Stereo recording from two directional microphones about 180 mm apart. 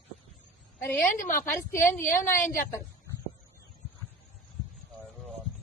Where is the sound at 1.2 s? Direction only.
45° left (ahead or behind).